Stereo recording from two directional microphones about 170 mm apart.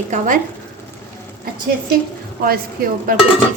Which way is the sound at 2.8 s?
60° right (ahead or behind).